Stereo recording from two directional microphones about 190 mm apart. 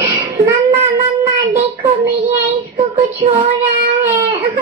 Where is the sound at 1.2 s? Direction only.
15° right (ahead or behind).